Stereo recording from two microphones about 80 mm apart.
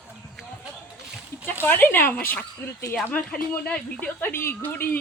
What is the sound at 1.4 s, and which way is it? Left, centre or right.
Speech, left.